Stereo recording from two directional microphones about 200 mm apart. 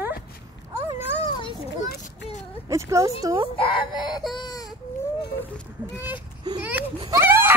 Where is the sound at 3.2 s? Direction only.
20° right (ahead or behind).